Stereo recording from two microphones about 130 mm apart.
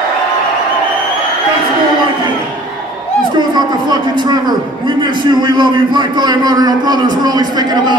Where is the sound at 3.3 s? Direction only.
35° right (ahead or behind).